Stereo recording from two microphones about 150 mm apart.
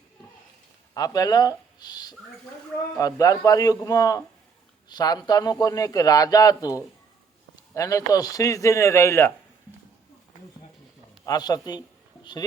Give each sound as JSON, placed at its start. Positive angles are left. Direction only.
{"t": 0.9, "sound": "speech", "side_deg": 25}
{"t": 11.3, "sound": "speech", "side_deg": 25}